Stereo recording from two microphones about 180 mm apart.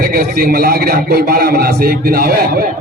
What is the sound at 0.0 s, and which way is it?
Speech, 55° right (ahead or behind).